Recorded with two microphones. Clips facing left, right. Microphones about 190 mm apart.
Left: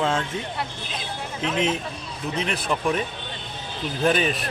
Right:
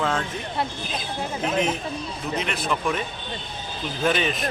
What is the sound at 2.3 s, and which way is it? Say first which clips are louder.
Speech: left 1 dB; 35° left (ahead or behind).